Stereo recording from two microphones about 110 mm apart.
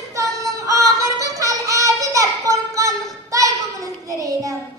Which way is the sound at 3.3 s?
30° right (ahead or behind).